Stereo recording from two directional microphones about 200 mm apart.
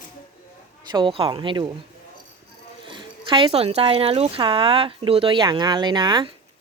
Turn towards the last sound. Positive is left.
turn(degrees=-20)  # may be behind; listen again after turning